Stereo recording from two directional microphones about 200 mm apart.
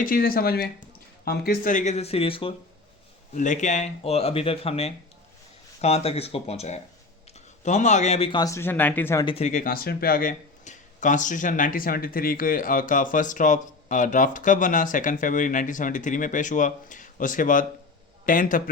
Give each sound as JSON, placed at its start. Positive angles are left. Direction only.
{"t": 0.0, "sound": "speech", "side_deg": 45}
{"t": 3.3, "sound": "speech", "side_deg": 40}
{"t": 9.2, "sound": "speech", "side_deg": 30}